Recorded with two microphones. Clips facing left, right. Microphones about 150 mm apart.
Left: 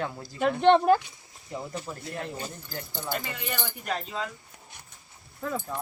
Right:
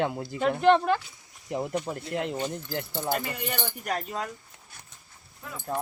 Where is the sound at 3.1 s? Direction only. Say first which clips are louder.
Right 2 dB; 50° right (ahead or behind).